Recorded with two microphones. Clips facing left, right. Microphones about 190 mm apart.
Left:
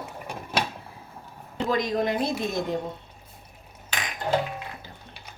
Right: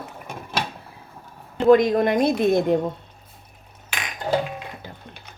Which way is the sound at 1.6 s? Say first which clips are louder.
Right 10 dB; 55° right (ahead or behind).